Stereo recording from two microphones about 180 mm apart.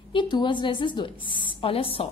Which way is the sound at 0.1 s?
25° left (ahead or behind).